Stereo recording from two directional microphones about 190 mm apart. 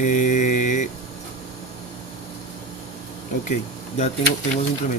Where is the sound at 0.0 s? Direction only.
40° left (ahead or behind).